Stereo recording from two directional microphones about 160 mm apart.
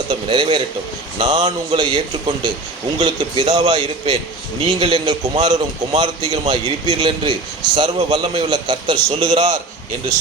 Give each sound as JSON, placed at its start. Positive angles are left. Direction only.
{"t": 0.1, "sound": "a man's voice", "side_deg": -30}
{"t": 3.0, "sound": "a man's voice", "side_deg": -40}
{"t": 3.5, "sound": "a man's voice", "side_deg": -30}
{"t": 5.5, "sound": "a man's voice", "side_deg": -40}